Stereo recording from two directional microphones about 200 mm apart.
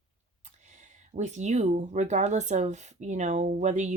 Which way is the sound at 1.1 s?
35° right (ahead or behind).